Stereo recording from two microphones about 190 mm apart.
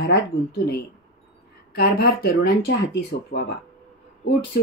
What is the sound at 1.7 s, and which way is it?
Speech, 55° left (ahead or behind).